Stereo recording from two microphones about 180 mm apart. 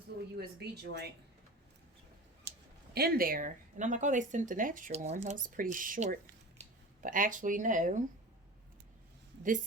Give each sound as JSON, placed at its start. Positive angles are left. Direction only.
{"t": 0.3, "sound": "speech", "side_deg": -65}
{"t": 2.5, "sound": "a sound", "side_deg": -80}
{"t": 2.9, "sound": "speech", "side_deg": -60}